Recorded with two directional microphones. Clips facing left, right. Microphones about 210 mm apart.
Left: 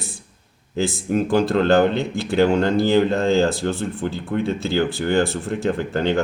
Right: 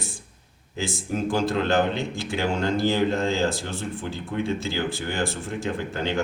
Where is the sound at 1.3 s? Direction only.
60° left (ahead or behind).